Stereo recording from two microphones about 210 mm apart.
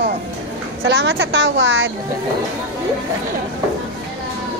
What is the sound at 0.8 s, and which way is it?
A woman's voice, 55° right (ahead or behind).